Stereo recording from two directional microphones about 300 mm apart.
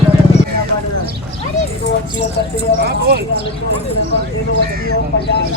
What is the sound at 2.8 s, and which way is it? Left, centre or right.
Clip-clop, right.